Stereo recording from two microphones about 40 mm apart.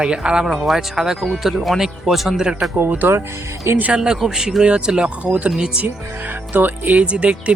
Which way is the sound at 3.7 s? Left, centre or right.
Right.